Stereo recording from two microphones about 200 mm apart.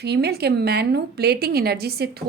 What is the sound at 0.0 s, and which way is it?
A woman's voice, 55° right (ahead or behind).